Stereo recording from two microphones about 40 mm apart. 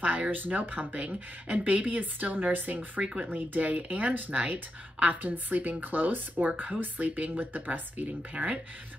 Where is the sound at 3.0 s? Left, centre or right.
Right.